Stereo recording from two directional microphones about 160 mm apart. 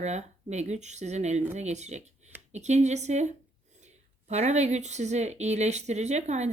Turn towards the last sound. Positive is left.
turn(degrees=-45)  # may be behind; listen again after turning